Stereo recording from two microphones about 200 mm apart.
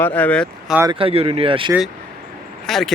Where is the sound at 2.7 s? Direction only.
Centre (ahead or behind).